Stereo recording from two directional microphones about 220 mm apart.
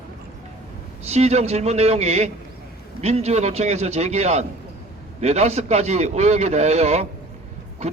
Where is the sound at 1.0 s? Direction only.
30° right (ahead or behind).